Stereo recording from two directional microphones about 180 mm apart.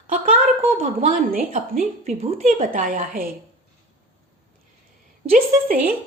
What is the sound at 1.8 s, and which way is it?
Speech, 35° right (ahead or behind).